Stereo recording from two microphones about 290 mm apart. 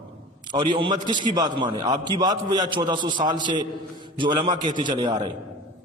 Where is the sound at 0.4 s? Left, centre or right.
Centre.